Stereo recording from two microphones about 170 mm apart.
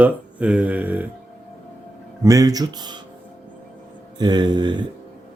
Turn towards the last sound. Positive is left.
turn(degrees=-25)  # may be behind; listen again after turning